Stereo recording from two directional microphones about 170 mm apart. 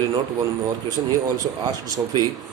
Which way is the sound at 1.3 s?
20° right (ahead or behind).